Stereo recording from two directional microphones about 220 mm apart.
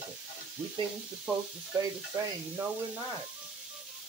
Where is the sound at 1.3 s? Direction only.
5° right (ahead or behind).